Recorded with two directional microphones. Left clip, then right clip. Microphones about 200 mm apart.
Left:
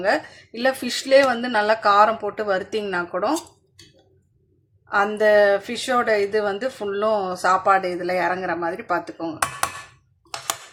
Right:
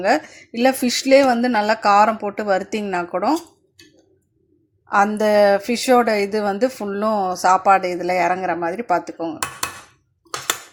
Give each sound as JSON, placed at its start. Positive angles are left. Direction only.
{"t": 0.0, "sound": "a woman's voice", "side_deg": -20}
{"t": 4.9, "sound": "a woman's voice", "side_deg": -25}